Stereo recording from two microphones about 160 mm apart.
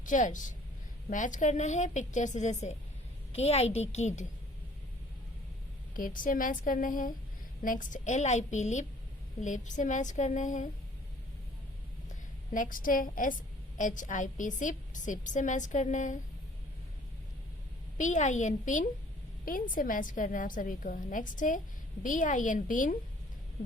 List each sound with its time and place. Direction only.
0.0 s a woman's voice: 55° left (ahead or behind)
5.9 s a woman's voice: 60° left (ahead or behind)
12.5 s a woman's voice: 60° left (ahead or behind)
17.9 s a woman's voice: 50° left (ahead or behind)